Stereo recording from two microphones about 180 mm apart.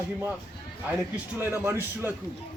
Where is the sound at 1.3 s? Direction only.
10° right (ahead or behind).